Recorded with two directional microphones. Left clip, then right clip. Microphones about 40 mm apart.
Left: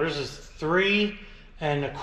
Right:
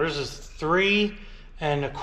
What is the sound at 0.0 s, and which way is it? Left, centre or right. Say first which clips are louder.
Speech: right 1 dB; right.